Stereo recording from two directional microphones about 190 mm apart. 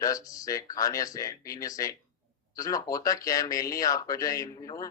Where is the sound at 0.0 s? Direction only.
20° left (ahead or behind).